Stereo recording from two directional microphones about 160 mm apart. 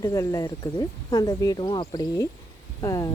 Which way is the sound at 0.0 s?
20° left (ahead or behind).